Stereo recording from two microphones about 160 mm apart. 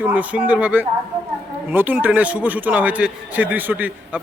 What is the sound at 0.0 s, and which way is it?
A man's voice, 10° right (ahead or behind).